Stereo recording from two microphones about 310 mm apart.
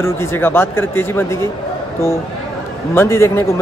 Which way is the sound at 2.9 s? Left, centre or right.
Centre.